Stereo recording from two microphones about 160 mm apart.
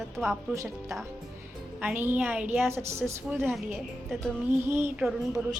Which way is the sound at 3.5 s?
Centre (ahead or behind).